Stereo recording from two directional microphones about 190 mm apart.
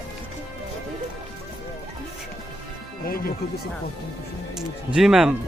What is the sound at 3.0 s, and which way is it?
Music, 50° left (ahead or behind).